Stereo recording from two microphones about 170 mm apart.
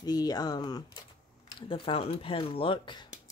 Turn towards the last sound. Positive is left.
turn(degrees=30)  # may be behind; listen again after turning